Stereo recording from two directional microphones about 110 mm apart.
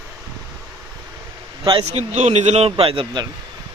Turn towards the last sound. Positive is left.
turn(degrees=-50)  # may be behind; listen again after turning